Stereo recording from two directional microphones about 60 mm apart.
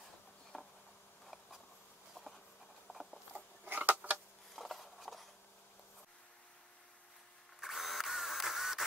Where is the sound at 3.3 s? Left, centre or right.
Right.